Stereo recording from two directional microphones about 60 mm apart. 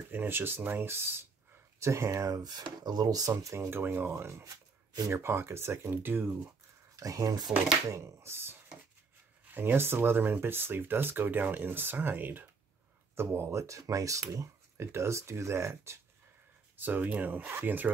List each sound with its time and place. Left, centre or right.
0.1 s speech: right
1.8 s speech: right
2.2 s speech: right
3.7 s speech: right
4.1 s speech: right
4.5 s shuffling cards: right
5.1 s speech: right
7.0 s speech: right
8.2 s speech: right
13.1 s speech: right
14.2 s speech: right
16.7 s speech: right